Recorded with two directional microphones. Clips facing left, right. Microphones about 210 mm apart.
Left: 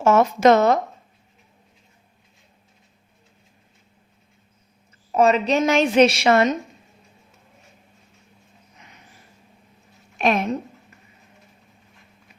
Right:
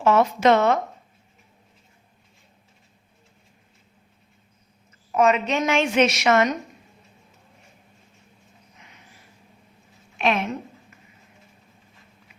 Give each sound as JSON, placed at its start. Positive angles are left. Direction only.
{"t": 0.0, "sound": "speech", "side_deg": 45}
{"t": 5.1, "sound": "a woman's voice", "side_deg": 35}
{"t": 10.2, "sound": "a woman's voice", "side_deg": 40}